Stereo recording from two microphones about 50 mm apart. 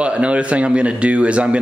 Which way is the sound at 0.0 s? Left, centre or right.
Right.